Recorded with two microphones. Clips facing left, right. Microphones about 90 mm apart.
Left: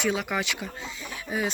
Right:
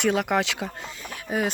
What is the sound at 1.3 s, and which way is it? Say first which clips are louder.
Speech: right 3 dB; 55° right (ahead or behind).